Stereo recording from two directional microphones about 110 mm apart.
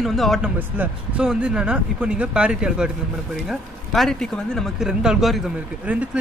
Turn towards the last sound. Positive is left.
turn(degrees=-15)  # may be behind; listen again after turning